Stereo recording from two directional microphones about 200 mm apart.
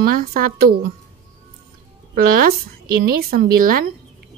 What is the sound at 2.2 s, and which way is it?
A woman's voice, 45° right (ahead or behind).